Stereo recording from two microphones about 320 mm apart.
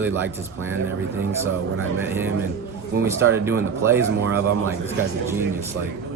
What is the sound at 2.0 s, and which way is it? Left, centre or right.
Speech, centre.